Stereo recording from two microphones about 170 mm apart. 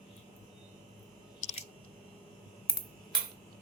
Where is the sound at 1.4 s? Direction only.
45° left (ahead or behind).